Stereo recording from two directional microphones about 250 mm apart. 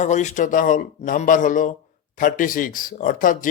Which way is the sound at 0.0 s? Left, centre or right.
Left.